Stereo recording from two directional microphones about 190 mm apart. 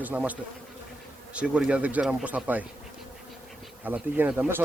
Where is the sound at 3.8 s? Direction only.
10° right (ahead or behind).